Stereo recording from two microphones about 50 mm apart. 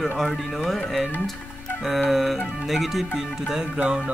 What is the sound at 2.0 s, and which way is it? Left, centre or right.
Speech, centre.